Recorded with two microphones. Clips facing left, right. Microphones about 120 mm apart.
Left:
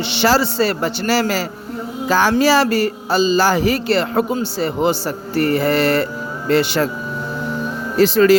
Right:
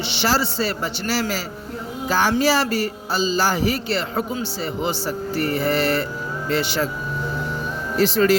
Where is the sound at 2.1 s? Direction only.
90° left.